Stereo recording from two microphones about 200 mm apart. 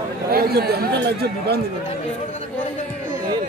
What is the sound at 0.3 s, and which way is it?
Speech, 50° right (ahead or behind).